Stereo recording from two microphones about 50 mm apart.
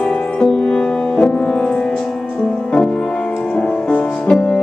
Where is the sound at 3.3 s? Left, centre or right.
Centre.